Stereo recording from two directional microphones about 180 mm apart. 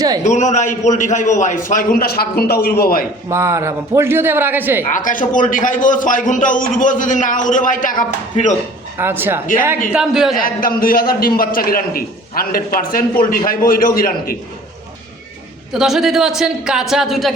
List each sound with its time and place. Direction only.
0.2 s a man's voice: 40° left (ahead or behind)
3.2 s a man's voice: 15° right (ahead or behind)
4.9 s a man's voice: 45° left (ahead or behind)
9.0 s a man's voice: 10° right (ahead or behind)
10.3 s a man's voice: 50° left (ahead or behind)
15.7 s a man's voice: centre (ahead or behind)